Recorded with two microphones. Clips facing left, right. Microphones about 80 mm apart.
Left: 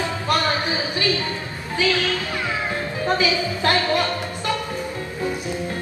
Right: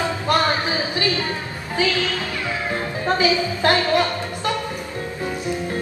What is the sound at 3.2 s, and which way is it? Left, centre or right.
Speech, right.